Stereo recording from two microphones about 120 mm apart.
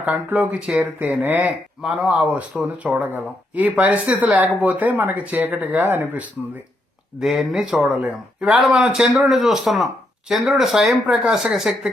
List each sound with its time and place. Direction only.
0.0 s speech: 15° right (ahead or behind)
1.8 s speech: 5° right (ahead or behind)
7.2 s speech: centre (ahead or behind)